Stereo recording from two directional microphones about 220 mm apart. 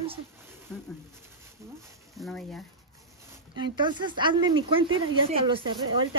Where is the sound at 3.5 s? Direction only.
20° right (ahead or behind).